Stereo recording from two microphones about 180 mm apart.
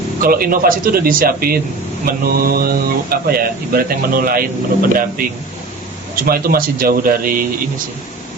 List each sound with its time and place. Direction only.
0.2 s speech: 55° right (ahead or behind)